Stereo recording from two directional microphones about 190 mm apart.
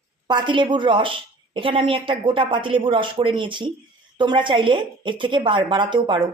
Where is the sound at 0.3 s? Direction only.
25° right (ahead or behind).